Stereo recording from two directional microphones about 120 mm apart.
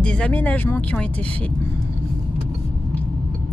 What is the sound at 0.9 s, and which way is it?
Speech, 10° left (ahead or behind).